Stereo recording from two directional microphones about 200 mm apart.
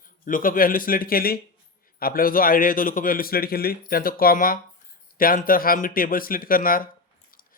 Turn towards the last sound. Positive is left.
turn(degrees=45)  # may be behind; listen again after turning